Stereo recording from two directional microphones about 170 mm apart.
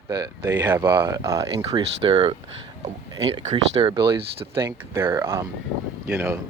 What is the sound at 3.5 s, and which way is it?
Speech, 30° right (ahead or behind).